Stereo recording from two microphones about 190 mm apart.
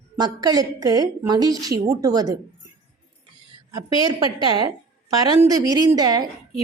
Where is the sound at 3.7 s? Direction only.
20° right (ahead or behind).